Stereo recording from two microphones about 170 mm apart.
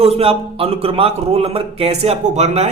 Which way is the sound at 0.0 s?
35° right (ahead or behind).